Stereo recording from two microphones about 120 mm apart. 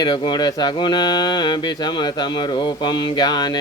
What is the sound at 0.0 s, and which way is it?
Mantra, 40° left (ahead or behind).